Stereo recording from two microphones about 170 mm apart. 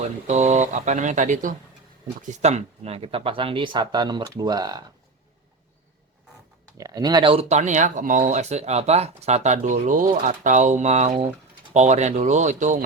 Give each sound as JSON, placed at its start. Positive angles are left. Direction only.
{"t": 0.3, "sound": "speech", "side_deg": -45}
{"t": 6.7, "sound": "speech", "side_deg": -20}